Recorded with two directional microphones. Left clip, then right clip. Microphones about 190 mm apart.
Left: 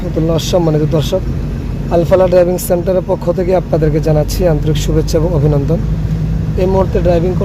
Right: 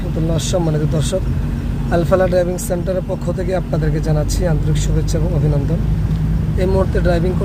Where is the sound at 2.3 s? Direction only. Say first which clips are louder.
Left 7 dB; 20° left (ahead or behind).